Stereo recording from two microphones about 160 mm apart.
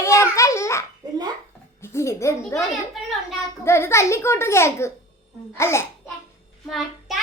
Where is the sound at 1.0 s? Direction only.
25° right (ahead or behind).